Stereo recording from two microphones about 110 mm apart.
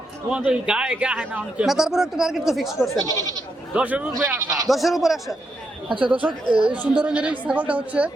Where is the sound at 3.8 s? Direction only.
10° right (ahead or behind).